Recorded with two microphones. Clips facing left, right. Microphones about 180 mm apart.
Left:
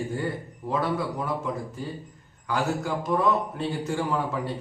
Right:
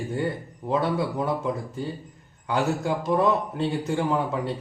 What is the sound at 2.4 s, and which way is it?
Speech, 25° right (ahead or behind).